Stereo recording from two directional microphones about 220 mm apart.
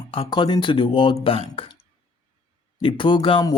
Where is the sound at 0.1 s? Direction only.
20° left (ahead or behind).